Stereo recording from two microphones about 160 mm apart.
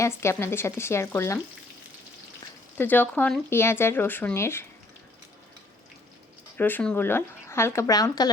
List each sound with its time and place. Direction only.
0.0 s speech: 15° left (ahead or behind)
2.7 s speech: 10° left (ahead or behind)
6.6 s speech: 10° left (ahead or behind)